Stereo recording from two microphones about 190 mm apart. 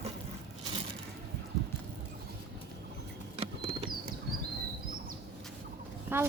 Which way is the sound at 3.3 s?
30° right (ahead or behind).